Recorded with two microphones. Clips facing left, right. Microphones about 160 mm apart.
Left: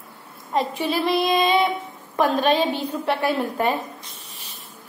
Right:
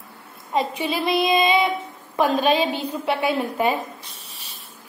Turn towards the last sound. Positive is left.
turn(degrees=-5)  # may be behind; listen again after turning